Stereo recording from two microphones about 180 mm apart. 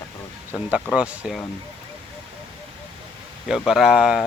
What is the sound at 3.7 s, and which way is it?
Speech, 5° right (ahead or behind).